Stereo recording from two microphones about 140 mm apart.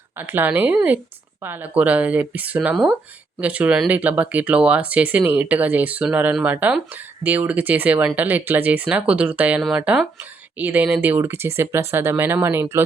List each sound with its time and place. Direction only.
0.2 s speech: 15° right (ahead or behind)